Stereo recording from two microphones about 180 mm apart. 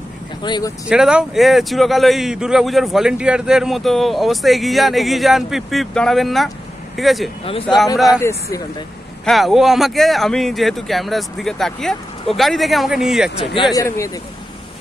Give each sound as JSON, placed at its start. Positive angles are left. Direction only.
{"t": 0.4, "sound": "speech", "side_deg": 25}
{"t": 0.8, "sound": "speech", "side_deg": -5}
{"t": 8.1, "sound": "speech", "side_deg": 15}
{"t": 9.2, "sound": "speech", "side_deg": 0}
{"t": 13.7, "sound": "speech", "side_deg": 15}